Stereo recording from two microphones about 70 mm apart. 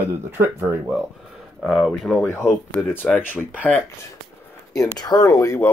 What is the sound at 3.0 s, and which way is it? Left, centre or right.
Speech, centre.